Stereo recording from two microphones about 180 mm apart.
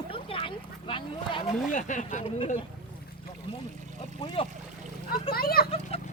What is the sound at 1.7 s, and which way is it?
Speech, 45° left (ahead or behind).